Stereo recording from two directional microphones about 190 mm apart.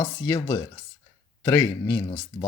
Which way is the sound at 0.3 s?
20° left (ahead or behind).